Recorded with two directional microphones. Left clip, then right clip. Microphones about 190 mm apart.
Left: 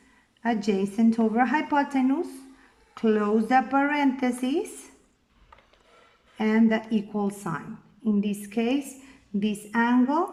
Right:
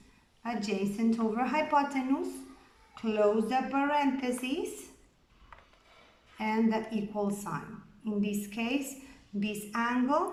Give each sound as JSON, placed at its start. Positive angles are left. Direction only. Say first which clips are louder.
{"t": 0.4, "sound": "a woman's voice", "louder": "left 7 dB", "side_deg": 45}
{"t": 6.3, "sound": "a woman's voice", "louder": "left 6 dB", "side_deg": 50}